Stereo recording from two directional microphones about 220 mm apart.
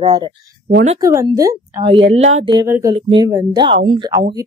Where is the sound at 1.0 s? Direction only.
15° right (ahead or behind).